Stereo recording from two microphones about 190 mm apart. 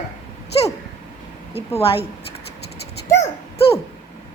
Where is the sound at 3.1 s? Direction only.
35° left (ahead or behind).